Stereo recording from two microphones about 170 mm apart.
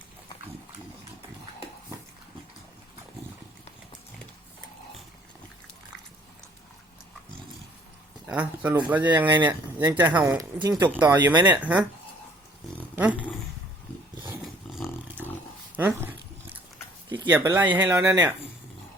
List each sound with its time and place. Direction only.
8.3 s speech: 10° right (ahead or behind)
10.8 s speech: 10° right (ahead or behind)
14.4 s roar: centre (ahead or behind)
15.7 s dog: 10° right (ahead or behind)
17.2 s speech: 15° right (ahead or behind)